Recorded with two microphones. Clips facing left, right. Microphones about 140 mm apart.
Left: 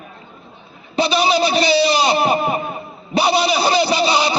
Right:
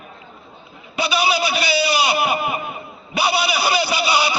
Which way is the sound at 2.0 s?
35° left (ahead or behind).